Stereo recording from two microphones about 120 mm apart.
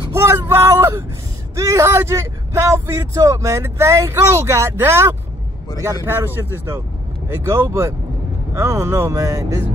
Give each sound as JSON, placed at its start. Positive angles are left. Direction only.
{"t": 0.1, "sound": "vehicle", "side_deg": -20}
{"t": 1.5, "sound": "speech", "side_deg": -25}